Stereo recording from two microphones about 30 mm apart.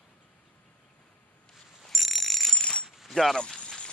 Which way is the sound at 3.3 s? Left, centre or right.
Left.